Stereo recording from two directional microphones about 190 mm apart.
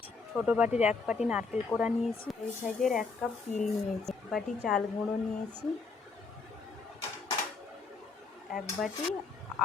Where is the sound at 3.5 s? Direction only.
40° left (ahead or behind).